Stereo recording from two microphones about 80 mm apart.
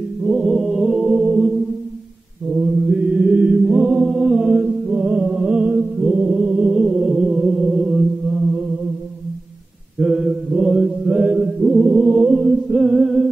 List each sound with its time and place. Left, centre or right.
0.2 s chant: centre
9.9 s mantra: centre